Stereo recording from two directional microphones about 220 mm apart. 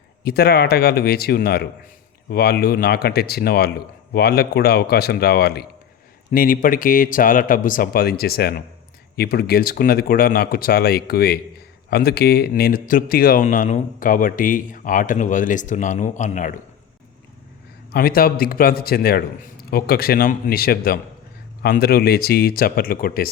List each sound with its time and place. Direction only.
0.3 s speech: 45° left (ahead or behind)
17.9 s speech: 45° left (ahead or behind)